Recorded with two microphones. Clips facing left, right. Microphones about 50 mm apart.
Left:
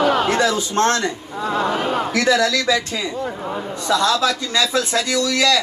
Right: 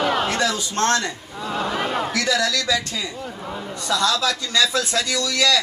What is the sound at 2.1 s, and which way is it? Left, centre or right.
A man's voice, left.